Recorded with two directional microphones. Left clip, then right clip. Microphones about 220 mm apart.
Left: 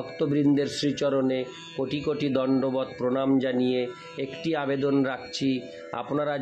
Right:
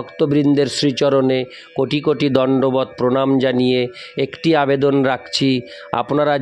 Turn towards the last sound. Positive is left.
turn(degrees=-50)  # may be behind; listen again after turning